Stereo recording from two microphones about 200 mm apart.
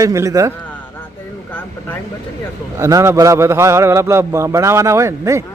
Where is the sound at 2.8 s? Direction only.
15° right (ahead or behind).